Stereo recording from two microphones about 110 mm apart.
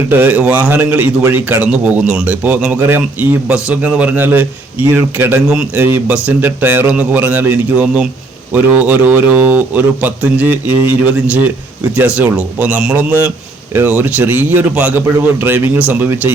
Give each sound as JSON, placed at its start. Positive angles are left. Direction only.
{"t": 0.1, "sound": "a man's voice", "side_deg": -20}